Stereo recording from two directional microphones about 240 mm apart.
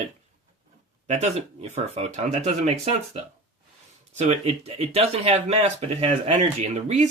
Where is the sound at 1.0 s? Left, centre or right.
Right.